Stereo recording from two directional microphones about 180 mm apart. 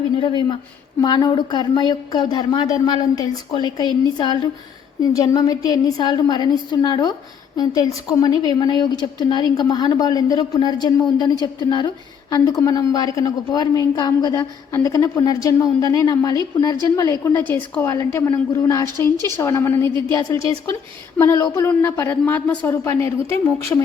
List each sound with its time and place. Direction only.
0.2 s a woman's voice: 25° left (ahead or behind)
12.3 s a woman's voice: 20° left (ahead or behind)